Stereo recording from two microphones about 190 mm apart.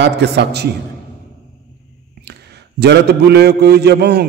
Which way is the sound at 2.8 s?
60° right (ahead or behind).